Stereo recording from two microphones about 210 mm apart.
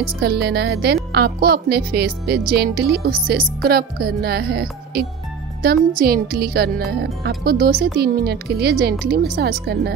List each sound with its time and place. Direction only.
0.2 s speech: 50° right (ahead or behind)